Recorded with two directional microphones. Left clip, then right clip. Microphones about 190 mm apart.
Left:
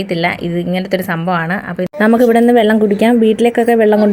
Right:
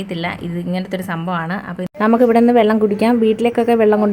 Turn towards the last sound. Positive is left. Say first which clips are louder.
# left 3 dB
turn(degrees=15)  # may be behind; listen again after turning